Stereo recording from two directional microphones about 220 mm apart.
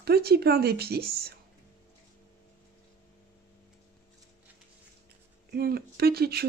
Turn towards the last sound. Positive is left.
turn(degrees=-45)  # may be behind; listen again after turning